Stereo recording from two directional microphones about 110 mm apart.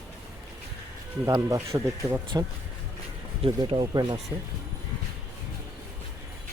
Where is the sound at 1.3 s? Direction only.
35° right (ahead or behind).